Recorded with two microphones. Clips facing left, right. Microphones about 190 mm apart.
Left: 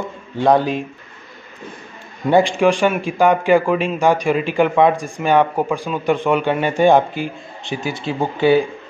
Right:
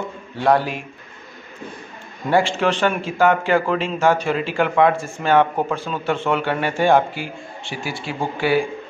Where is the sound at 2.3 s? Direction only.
15° left (ahead or behind).